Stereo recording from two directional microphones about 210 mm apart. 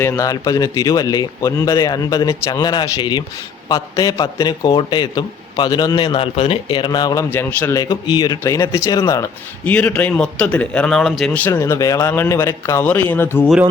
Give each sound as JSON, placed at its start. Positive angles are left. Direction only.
{"t": 0.0, "sound": "a man's voice", "side_deg": 15}